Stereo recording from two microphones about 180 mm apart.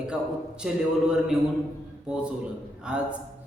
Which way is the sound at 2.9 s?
5° right (ahead or behind).